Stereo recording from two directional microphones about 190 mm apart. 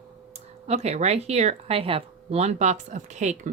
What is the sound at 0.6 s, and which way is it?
Speech, 35° right (ahead or behind).